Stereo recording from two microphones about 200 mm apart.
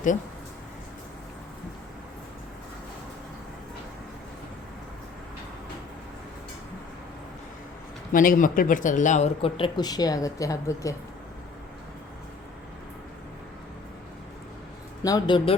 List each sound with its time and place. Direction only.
8.1 s speech: 45° left (ahead or behind); by 10.9 s 15° left (ahead or behind)
15.0 s speech: 15° left (ahead or behind)